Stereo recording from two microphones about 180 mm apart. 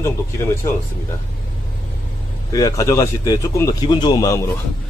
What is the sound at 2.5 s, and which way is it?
Speech, 20° left (ahead or behind).